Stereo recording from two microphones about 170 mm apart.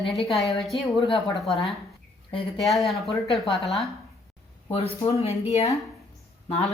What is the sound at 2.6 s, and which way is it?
A woman's voice, centre (ahead or behind).